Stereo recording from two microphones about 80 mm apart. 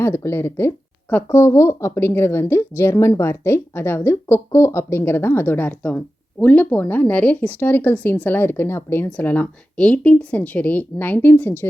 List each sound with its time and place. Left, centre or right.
0.0 s speech: left